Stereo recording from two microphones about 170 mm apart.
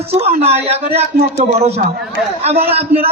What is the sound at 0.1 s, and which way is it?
Speech, 40° right (ahead or behind).